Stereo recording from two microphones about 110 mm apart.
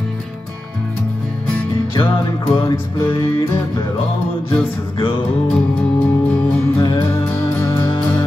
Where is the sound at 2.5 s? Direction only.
30° left (ahead or behind).